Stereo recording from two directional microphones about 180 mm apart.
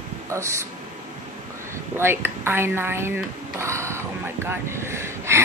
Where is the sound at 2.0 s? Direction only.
15° right (ahead or behind).